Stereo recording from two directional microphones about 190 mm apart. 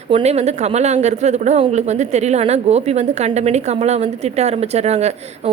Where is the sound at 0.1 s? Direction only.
35° right (ahead or behind).